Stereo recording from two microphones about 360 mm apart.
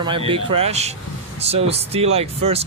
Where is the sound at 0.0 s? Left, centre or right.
Centre.